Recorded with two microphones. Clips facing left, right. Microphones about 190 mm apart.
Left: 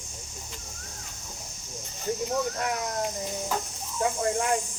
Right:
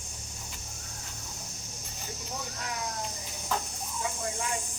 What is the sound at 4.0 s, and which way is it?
Speech, 60° left (ahead or behind).